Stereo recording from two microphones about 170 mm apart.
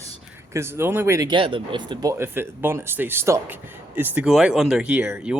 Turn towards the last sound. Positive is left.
turn(degrees=-5)  # may be behind; listen again after turning